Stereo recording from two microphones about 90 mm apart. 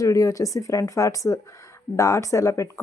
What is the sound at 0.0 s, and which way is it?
A woman's voice, 40° left (ahead or behind).